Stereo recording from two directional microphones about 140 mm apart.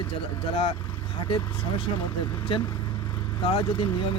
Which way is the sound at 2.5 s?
40° left (ahead or behind).